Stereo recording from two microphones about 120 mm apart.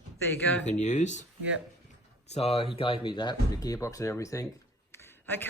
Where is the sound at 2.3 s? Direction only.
60° left (ahead or behind).